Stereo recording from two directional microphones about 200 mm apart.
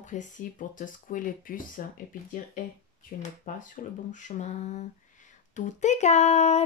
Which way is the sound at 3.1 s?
45° left (ahead or behind).